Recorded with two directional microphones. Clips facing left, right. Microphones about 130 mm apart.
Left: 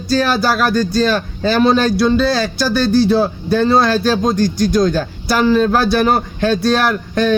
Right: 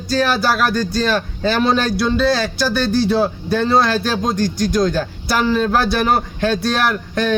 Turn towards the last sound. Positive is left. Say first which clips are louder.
# left 3 dB
turn(degrees=35)  # may be behind; listen again after turning